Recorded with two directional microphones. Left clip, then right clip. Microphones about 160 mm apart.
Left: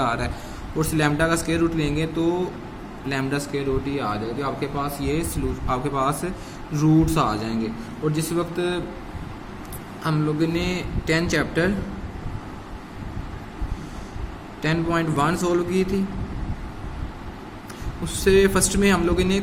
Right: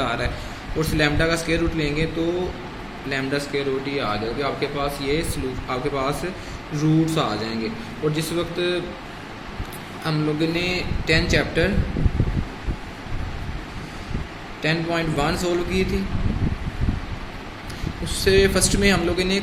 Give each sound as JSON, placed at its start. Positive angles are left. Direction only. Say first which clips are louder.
{"t": 0.0, "sound": "a sound", "louder": "left 1 dB", "side_deg": 75}
{"t": 0.8, "sound": "speech", "louder": "right 1 dB", "side_deg": 80}
{"t": 3.1, "sound": "speech", "louder": "right 1 dB", "side_deg": 85}
{"t": 10.0, "sound": "speech", "louder": "even", "side_deg": 80}
{"t": 14.6, "sound": "speech", "louder": "even", "side_deg": 75}
{"t": 18.0, "sound": "speech", "louder": "even", "side_deg": 80}